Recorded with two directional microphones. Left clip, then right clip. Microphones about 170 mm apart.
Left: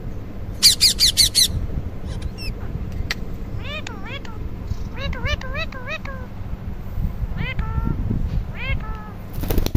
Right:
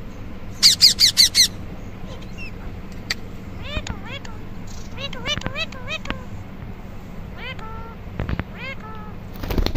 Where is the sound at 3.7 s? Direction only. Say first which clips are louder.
Even; 10° left (ahead or behind).